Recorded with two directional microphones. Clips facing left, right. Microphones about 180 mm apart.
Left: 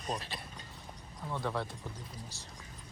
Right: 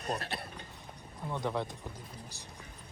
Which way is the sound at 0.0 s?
60° right (ahead or behind).